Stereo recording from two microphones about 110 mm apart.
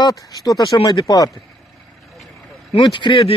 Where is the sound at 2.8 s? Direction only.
45° left (ahead or behind).